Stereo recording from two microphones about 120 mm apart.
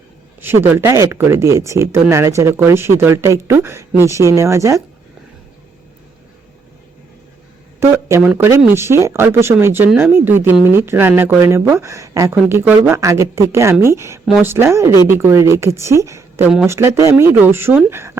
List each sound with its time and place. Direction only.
0.4 s speech: 20° right (ahead or behind)
7.8 s speech: 25° right (ahead or behind)